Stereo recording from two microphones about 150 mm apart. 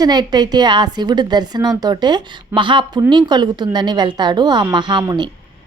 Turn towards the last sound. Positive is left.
turn(degrees=-30)  # may be behind; listen again after turning